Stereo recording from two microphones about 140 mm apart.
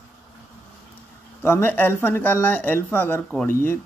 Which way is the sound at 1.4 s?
15° left (ahead or behind).